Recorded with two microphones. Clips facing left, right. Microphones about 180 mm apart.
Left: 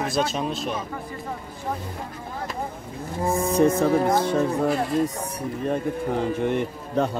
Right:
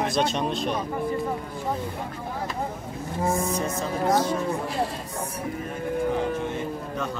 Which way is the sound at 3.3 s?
60° left (ahead or behind).